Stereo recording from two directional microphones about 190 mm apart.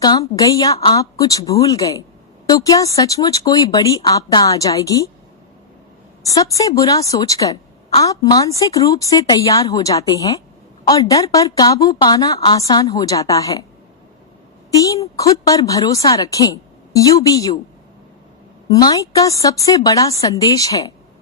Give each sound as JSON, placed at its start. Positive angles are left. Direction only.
{"t": 0.0, "sound": "a woman's voice", "side_deg": 20}
{"t": 6.2, "sound": "a woman's voice", "side_deg": 15}
{"t": 14.7, "sound": "a woman's voice", "side_deg": 20}
{"t": 18.7, "sound": "a woman's voice", "side_deg": 20}